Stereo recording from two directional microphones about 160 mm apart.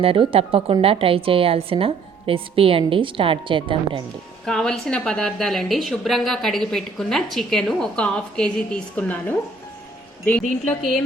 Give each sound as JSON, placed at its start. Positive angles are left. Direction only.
{"t": 0.0, "sound": "a woman's voice", "side_deg": -35}
{"t": 4.4, "sound": "a woman's voice", "side_deg": 5}